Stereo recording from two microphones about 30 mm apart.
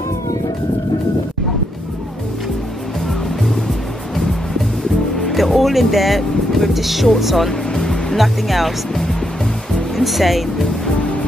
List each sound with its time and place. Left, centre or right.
5.3 s music: centre
7.2 s speech: centre
7.7 s music: centre
8.2 s speech: centre
9.9 s speech: centre